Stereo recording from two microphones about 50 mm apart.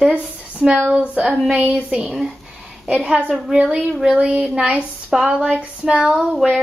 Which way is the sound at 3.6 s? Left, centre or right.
Right.